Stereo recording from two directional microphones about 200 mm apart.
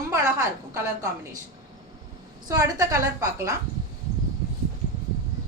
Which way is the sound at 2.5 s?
15° right (ahead or behind).